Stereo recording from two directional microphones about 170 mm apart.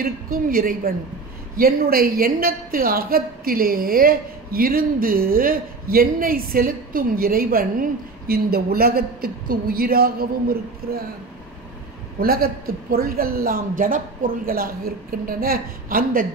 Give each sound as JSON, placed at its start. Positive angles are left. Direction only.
{"t": 0.0, "sound": "a woman's voice", "side_deg": -55}
{"t": 12.2, "sound": "a woman's voice", "side_deg": -60}